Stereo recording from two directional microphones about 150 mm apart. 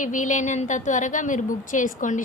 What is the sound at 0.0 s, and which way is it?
A woman's voice, 60° left (ahead or behind).